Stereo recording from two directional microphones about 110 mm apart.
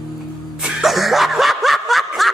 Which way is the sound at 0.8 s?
Centre (ahead or behind).